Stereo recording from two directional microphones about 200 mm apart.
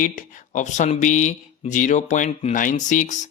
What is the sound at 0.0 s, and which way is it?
Speech, 40° left (ahead or behind).